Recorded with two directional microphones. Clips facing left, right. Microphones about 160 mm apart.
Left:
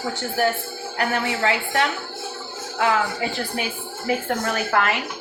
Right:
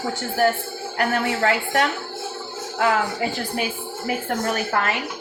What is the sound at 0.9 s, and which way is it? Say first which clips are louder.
A woman's voice: right 2 dB; 45° right (ahead or behind).